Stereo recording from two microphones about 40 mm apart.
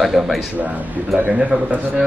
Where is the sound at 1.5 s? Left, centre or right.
Right.